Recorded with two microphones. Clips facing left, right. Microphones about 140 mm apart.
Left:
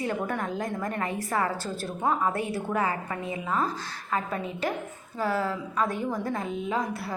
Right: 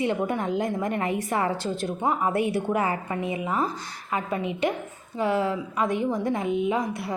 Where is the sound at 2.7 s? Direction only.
25° right (ahead or behind).